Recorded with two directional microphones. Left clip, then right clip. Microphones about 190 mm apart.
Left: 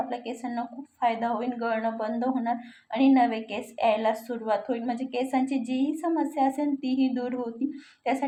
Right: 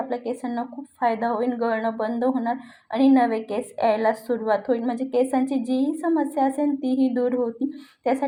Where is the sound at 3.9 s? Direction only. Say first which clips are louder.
Right 4 dB; centre (ahead or behind).